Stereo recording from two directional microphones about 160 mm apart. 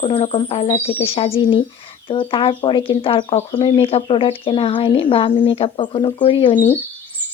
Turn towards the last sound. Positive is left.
turn(degrees=30)  # may be behind; listen again after turning